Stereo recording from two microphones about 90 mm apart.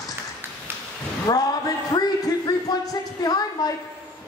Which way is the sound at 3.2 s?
45° left (ahead or behind).